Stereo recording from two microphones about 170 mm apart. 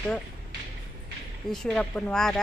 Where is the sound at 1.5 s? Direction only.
5° left (ahead or behind).